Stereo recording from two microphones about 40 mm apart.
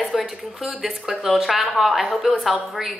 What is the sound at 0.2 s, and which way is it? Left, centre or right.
A woman's voice, centre.